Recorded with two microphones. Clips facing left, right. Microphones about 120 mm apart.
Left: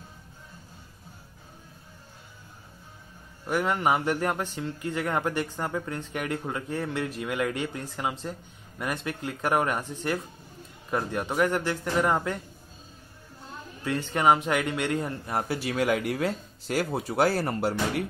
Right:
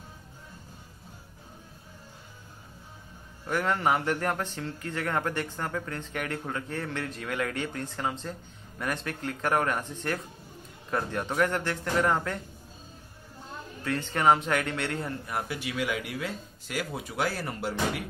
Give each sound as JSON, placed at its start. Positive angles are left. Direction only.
{"t": 3.4, "sound": "speech", "side_deg": 15}
{"t": 13.8, "sound": "speech", "side_deg": 15}
{"t": 15.2, "sound": "speech", "side_deg": 30}